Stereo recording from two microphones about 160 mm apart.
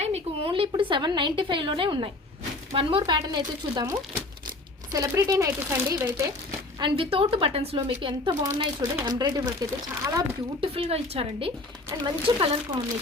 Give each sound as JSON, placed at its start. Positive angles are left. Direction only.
{"t": 0.0, "sound": "a woman's voice", "side_deg": -40}
{"t": 6.7, "sound": "a woman's voice", "side_deg": -35}
{"t": 10.6, "sound": "a woman's voice", "side_deg": -35}